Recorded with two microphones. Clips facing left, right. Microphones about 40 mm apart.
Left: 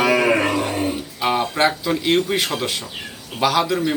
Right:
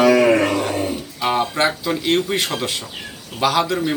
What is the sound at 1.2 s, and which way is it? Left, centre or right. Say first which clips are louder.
Speech: even; centre.